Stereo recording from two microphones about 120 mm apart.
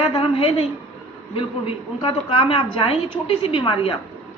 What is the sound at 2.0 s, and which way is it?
A woman's voice, 45° left (ahead or behind).